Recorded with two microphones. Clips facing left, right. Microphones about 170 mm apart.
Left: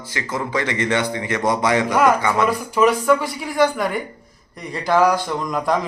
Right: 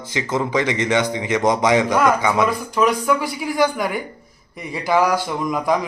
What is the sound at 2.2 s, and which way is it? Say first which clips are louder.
Speech: right 1 dB; 15° right (ahead or behind).